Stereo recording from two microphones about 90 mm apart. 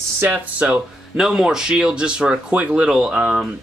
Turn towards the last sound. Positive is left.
turn(degrees=-10)  # may be behind; listen again after turning